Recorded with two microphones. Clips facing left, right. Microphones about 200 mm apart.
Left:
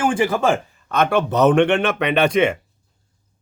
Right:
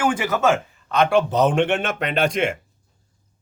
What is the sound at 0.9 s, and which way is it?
Speech, 55° left (ahead or behind).